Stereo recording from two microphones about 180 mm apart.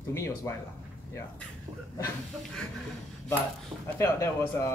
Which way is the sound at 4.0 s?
15° left (ahead or behind).